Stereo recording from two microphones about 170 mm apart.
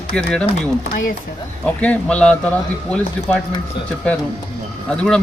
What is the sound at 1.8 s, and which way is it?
Speech, 5° left (ahead or behind).